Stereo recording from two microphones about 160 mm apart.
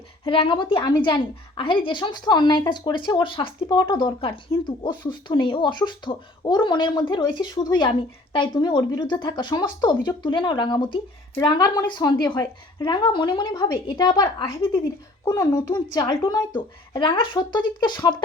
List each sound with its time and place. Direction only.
0.3 s a woman's voice: 35° left (ahead or behind)
15.2 s a woman's voice: 20° left (ahead or behind)